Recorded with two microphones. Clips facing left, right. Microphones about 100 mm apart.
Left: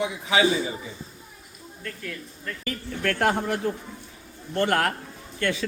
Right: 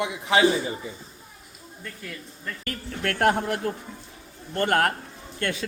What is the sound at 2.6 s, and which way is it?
Speech, 50° right (ahead or behind).